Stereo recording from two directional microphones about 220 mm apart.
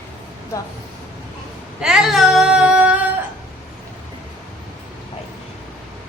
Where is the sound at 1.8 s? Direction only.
Centre (ahead or behind).